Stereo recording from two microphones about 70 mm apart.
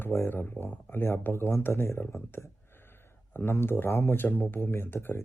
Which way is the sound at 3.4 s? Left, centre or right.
Left.